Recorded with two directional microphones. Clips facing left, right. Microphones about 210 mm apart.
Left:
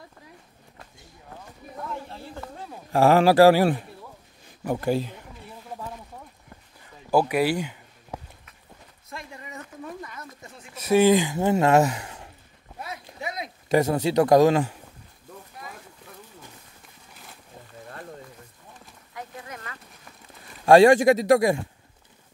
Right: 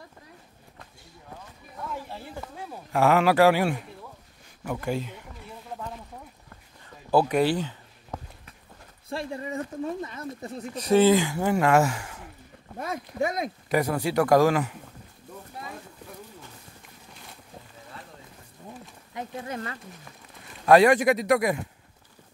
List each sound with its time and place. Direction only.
2.9 s a man's voice: 30° left (ahead or behind)
7.1 s a sound: 10° left (ahead or behind)
9.1 s speech: 30° right (ahead or behind)
10.7 s speech: 10° left (ahead or behind)
12.7 s speech: 50° right (ahead or behind)
13.7 s speech: 25° left (ahead or behind)
19.1 s speech: 30° right (ahead or behind)
20.6 s speech: 25° left (ahead or behind)